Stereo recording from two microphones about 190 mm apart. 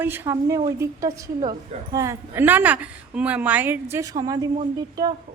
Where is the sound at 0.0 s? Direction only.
10° right (ahead or behind).